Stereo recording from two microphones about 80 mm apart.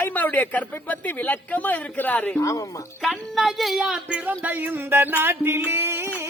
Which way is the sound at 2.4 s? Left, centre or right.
Left.